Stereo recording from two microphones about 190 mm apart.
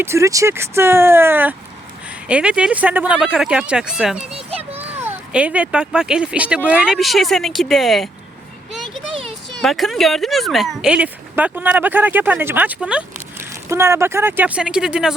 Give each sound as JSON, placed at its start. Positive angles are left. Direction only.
{"t": 0.0, "sound": "speech", "side_deg": -15}
{"t": 9.6, "sound": "speech", "side_deg": 0}